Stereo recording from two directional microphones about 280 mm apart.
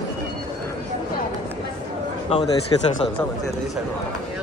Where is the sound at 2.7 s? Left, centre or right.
Centre.